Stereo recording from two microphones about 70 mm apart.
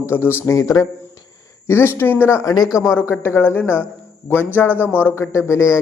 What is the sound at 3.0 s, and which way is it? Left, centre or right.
Speech, left.